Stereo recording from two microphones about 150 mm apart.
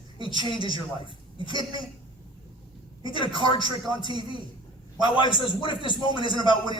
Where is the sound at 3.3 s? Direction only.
35° left (ahead or behind).